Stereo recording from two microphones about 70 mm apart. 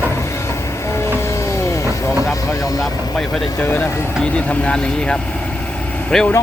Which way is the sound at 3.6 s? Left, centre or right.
Left.